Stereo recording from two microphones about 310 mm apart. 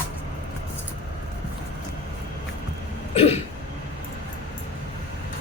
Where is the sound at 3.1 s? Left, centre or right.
Centre.